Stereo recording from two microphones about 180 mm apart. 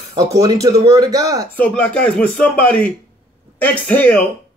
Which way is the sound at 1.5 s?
10° left (ahead or behind).